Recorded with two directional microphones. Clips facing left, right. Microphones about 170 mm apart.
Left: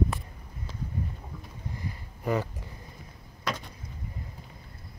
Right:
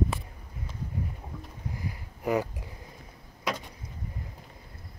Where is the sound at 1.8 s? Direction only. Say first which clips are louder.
Right 1 dB; 15° right (ahead or behind).